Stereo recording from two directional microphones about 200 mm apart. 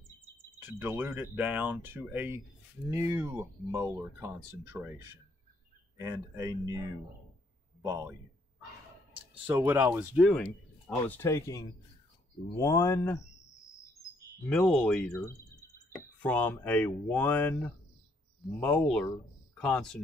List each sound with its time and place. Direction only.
0.6 s speech: 10° right (ahead or behind)
5.9 s a man's voice: 15° right (ahead or behind)
9.5 s speech: 15° right (ahead or behind)
11.1 s speech: 10° left (ahead or behind)
14.5 s speech: 5° left (ahead or behind)